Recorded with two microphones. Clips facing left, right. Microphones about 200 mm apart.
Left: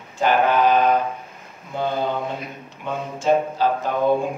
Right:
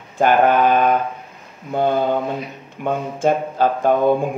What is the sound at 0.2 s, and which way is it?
Speech, 50° right (ahead or behind).